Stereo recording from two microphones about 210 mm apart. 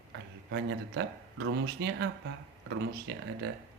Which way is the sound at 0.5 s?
60° right (ahead or behind).